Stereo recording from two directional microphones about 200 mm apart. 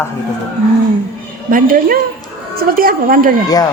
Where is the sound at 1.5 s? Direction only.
45° right (ahead or behind).